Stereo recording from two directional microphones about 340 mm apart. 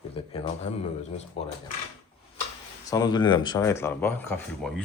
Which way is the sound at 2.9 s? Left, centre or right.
Centre.